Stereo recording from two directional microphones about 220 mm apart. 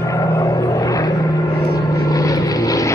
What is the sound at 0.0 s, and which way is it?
Vehicle, 15° left (ahead or behind).